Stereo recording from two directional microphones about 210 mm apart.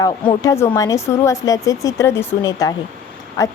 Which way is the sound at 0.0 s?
15° left (ahead or behind).